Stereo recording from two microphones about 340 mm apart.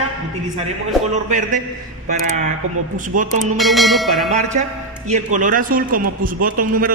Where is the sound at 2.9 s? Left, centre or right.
Right.